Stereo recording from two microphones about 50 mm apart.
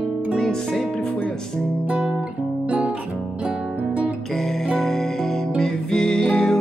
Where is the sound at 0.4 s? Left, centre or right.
Centre.